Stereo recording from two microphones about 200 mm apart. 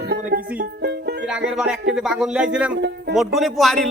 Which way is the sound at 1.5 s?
5° right (ahead or behind).